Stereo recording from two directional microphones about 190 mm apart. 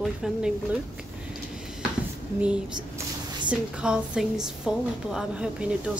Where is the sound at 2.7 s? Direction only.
25° right (ahead or behind).